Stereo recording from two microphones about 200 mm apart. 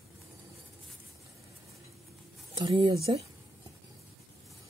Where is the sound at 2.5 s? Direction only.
25° right (ahead or behind).